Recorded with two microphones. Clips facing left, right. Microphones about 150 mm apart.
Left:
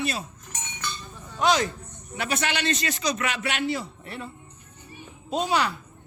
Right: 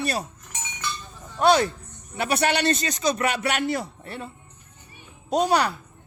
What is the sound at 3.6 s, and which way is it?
Speech, 55° right (ahead or behind).